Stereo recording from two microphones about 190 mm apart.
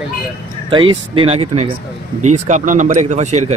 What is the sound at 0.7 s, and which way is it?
Speech, 25° right (ahead or behind).